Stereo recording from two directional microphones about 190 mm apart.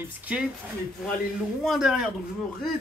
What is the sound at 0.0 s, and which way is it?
Speech, 10° right (ahead or behind).